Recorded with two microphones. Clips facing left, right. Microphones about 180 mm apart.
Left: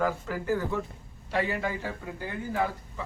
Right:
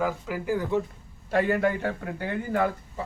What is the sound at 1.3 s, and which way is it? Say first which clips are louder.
A man's voice: right 6 dB; 50° right (ahead or behind).